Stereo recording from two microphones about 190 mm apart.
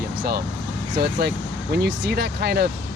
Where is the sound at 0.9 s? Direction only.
60° right (ahead or behind).